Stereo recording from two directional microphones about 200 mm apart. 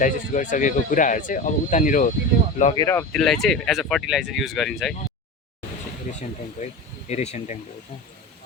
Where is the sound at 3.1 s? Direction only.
5° left (ahead or behind).